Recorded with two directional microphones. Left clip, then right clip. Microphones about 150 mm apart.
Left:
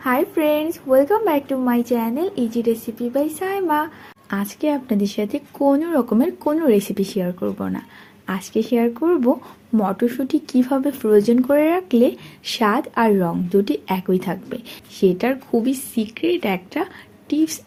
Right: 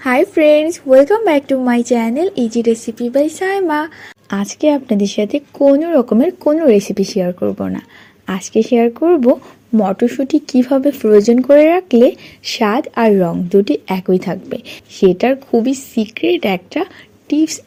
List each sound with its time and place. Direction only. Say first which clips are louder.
0.0 s speech: right 8 dB; 50° right (ahead or behind)